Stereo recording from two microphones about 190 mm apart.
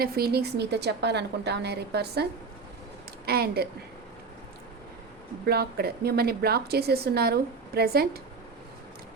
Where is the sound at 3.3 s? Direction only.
55° right (ahead or behind).